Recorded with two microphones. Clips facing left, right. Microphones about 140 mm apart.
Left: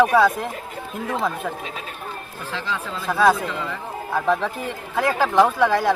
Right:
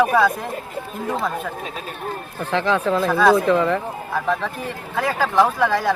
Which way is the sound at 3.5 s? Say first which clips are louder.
Right 12 dB; 60° right (ahead or behind).